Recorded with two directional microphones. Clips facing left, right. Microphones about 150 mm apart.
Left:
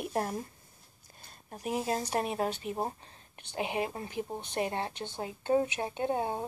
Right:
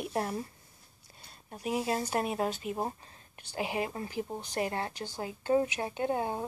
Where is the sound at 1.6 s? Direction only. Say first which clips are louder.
Right 1 dB; 40° left (ahead or behind).